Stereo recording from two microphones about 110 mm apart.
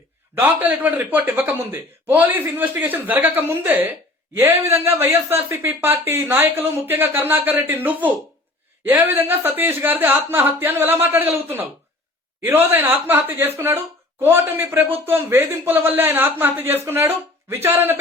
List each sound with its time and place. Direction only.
0.3 s speech: 15° right (ahead or behind)